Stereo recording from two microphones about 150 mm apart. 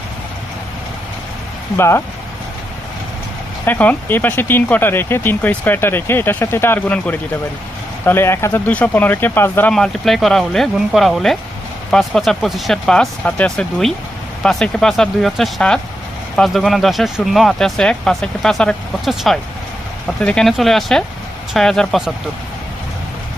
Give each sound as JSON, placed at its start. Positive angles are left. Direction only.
{"t": 1.7, "sound": "speech", "side_deg": 15}
{"t": 3.7, "sound": "speech", "side_deg": 10}
{"t": 9.7, "sound": "speech", "side_deg": 0}